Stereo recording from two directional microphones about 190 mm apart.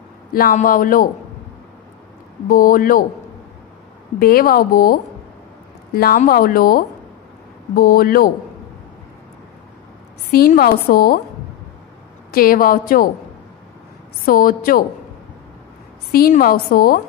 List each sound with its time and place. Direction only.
0.3 s a woman's voice: 50° left (ahead or behind)
2.4 s a woman's voice: 45° left (ahead or behind)
4.2 s a woman's voice: 50° left (ahead or behind)
5.9 s a woman's voice: 50° left (ahead or behind)
10.3 s a woman's voice: 55° left (ahead or behind)
12.3 s a woman's voice: 50° left (ahead or behind)
14.2 s a woman's voice: 50° left (ahead or behind)
16.1 s a woman's voice: 50° left (ahead or behind)